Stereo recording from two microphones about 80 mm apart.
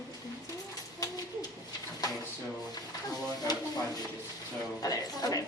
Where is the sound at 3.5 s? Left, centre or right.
Left.